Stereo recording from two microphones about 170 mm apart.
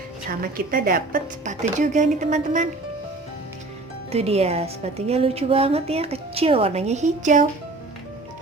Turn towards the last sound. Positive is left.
turn(degrees=-45)  # may be behind; listen again after turning